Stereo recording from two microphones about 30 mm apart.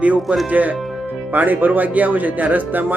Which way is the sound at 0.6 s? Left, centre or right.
Right.